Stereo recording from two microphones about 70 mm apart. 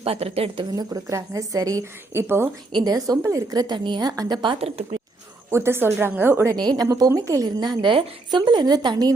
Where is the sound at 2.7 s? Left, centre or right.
Right.